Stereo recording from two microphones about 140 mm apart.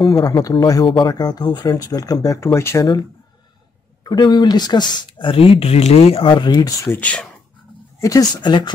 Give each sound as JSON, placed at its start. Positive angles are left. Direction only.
{"t": 0.2, "sound": "speech", "side_deg": 25}
{"t": 4.0, "sound": "speech", "side_deg": 30}
{"t": 7.0, "sound": "speech", "side_deg": 10}
{"t": 8.0, "sound": "speech", "side_deg": 25}